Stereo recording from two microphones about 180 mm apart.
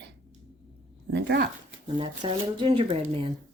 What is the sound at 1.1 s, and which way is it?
Speech, 75° right (ahead or behind).